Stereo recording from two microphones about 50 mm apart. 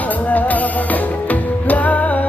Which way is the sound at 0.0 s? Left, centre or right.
Left.